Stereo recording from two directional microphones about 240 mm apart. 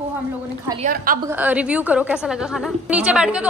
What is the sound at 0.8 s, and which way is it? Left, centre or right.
Speech, right.